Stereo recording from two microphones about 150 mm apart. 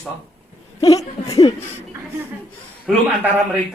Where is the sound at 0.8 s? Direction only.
25° left (ahead or behind).